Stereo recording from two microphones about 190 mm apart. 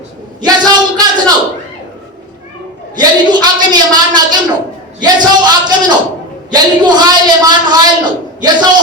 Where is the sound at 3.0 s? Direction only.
20° right (ahead or behind).